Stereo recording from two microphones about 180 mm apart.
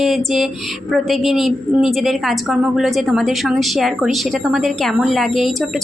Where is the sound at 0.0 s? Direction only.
Centre (ahead or behind).